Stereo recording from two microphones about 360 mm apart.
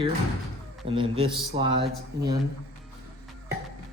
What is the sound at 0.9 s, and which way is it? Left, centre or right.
Speech, centre.